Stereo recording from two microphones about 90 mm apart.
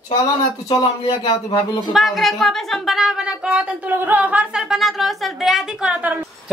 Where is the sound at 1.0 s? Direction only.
65° left (ahead or behind).